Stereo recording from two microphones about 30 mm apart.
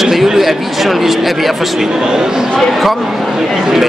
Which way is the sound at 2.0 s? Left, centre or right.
Right.